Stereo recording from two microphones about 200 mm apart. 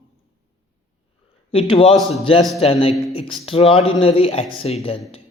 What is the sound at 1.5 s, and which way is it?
Speech, 25° left (ahead or behind).